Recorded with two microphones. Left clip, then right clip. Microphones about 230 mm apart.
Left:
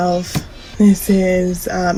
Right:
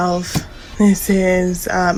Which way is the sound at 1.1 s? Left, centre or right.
Right.